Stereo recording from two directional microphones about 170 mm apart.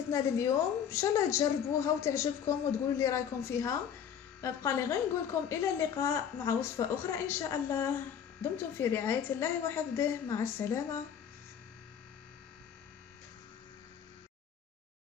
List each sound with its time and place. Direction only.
0.1 s a woman's voice: 15° left (ahead or behind)